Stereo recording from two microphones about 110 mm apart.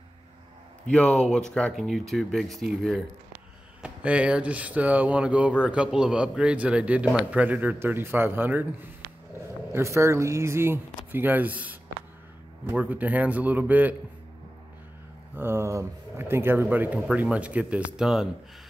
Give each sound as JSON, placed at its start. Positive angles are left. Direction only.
{"t": 0.8, "sound": "speech", "side_deg": 10}
{"t": 3.8, "sound": "a man's voice", "side_deg": -10}
{"t": 9.7, "sound": "a man's voice", "side_deg": -25}
{"t": 15.3, "sound": "a man's voice", "side_deg": -20}